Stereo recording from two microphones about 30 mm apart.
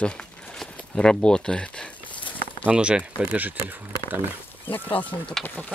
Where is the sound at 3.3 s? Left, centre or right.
Right.